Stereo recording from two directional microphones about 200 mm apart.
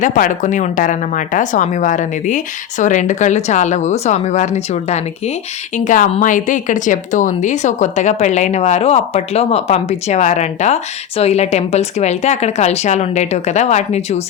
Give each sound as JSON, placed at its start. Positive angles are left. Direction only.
{"t": 0.0, "sound": "a woman's voice", "side_deg": 40}